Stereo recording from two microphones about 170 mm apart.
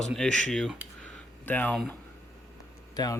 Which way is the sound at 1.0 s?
10° left (ahead or behind).